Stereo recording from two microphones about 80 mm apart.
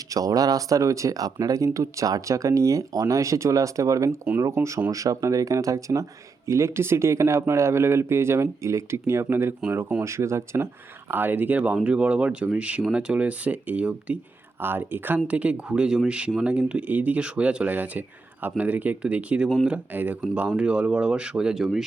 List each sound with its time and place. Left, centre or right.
0.1 s speech: right
11.1 s speech: right; by 21.8 s centre